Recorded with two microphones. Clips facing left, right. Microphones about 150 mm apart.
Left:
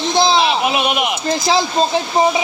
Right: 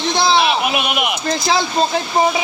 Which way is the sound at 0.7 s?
30° left (ahead or behind).